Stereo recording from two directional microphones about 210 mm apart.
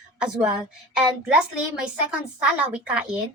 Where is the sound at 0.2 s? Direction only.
5° right (ahead or behind).